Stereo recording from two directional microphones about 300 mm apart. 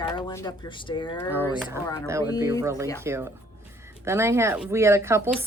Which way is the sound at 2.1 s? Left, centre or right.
Centre.